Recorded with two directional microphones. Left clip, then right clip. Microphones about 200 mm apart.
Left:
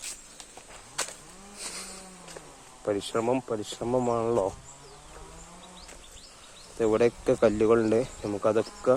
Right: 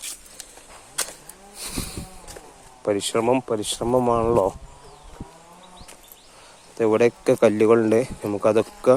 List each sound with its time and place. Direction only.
2.8 s speech: 25° right (ahead or behind)
6.7 s speech: 15° right (ahead or behind)